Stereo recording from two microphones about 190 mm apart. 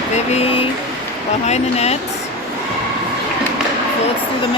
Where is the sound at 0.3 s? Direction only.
30° left (ahead or behind).